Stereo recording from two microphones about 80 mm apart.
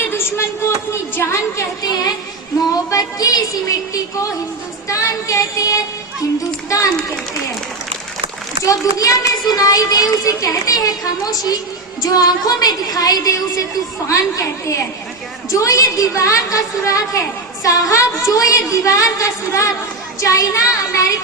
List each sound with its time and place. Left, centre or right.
0.1 s a sound: left
1.1 s a woman's voice: left
1.8 s a sound: left
2.9 s music: left
4.9 s child singing: left
6.7 s a child's voice: left
8.6 s a child's voice: left
14.1 s a woman's voice: left